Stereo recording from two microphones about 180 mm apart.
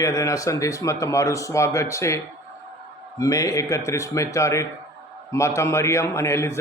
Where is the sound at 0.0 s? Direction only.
15° left (ahead or behind).